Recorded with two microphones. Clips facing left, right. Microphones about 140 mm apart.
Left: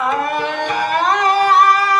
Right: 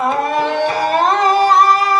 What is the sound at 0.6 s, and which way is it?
Music, 35° right (ahead or behind).